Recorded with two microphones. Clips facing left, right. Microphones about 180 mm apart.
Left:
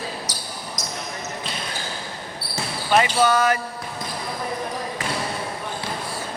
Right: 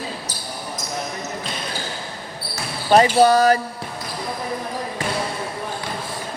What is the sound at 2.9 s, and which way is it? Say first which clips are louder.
Speech: right 5 dB; 40° right (ahead or behind).